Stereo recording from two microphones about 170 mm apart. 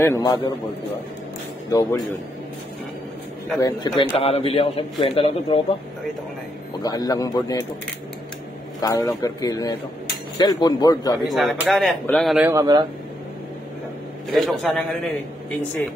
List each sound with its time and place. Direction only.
0.0 s speech: 20° left (ahead or behind)
1.7 s speech: 20° left (ahead or behind)
3.5 s a man's voice: 25° left (ahead or behind)
6.8 s speech: 20° left (ahead or behind)
8.8 s speech: 20° left (ahead or behind)
11.2 s speech: centre (ahead or behind)
12.4 s speech: 20° right (ahead or behind)
14.3 s speech: centre (ahead or behind)